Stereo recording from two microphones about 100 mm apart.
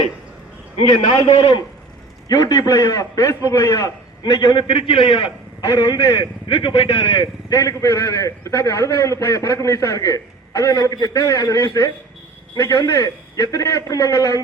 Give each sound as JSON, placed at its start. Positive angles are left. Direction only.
{"t": 1.2, "sound": "a man's voice", "side_deg": 80}
{"t": 2.3, "sound": "a man's voice", "side_deg": 35}
{"t": 5.6, "sound": "a man's voice", "side_deg": 40}
{"t": 7.5, "sound": "a man's voice", "side_deg": 35}